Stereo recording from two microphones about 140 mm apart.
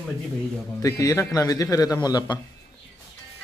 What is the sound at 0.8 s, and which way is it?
A man's voice, 25° left (ahead or behind).